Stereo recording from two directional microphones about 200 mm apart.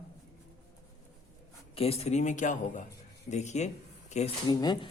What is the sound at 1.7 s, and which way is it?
Speech, 30° left (ahead or behind).